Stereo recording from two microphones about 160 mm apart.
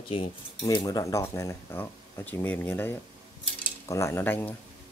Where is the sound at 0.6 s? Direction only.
25° left (ahead or behind).